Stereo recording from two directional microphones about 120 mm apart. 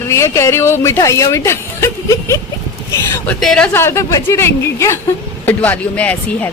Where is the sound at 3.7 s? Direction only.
20° left (ahead or behind).